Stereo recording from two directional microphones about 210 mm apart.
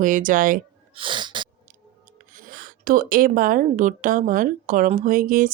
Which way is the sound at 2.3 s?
40° right (ahead or behind).